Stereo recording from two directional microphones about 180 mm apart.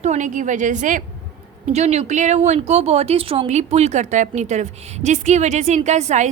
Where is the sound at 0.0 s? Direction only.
40° right (ahead or behind).